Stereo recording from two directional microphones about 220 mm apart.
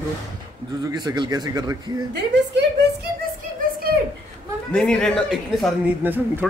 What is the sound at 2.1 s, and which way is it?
Speech, 50° right (ahead or behind).